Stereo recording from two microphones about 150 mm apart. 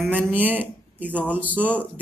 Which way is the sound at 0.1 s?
10° right (ahead or behind).